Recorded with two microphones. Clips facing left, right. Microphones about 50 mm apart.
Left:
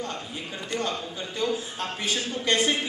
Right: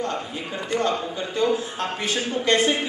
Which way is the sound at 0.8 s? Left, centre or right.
Centre.